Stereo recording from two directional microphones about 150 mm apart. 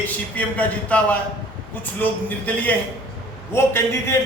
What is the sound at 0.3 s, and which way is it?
Speech, 10° left (ahead or behind).